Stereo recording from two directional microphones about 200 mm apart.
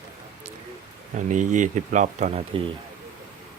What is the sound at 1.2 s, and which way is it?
Speech, 40° right (ahead or behind).